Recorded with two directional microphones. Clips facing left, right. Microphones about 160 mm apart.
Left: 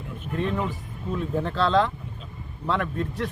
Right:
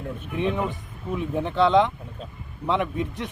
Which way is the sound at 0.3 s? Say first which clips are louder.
Right 1 dB; 15° right (ahead or behind).